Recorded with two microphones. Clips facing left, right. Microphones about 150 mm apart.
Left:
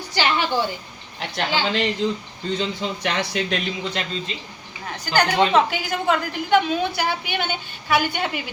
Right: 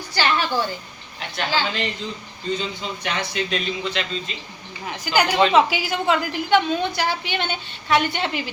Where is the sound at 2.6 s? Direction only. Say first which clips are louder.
Left 4 dB; 75° left (ahead or behind).